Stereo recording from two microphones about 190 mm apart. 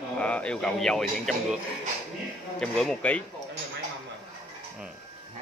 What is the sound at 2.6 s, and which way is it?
Speech, 5° left (ahead or behind).